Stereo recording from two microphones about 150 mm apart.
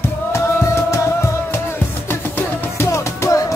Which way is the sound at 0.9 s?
15° left (ahead or behind).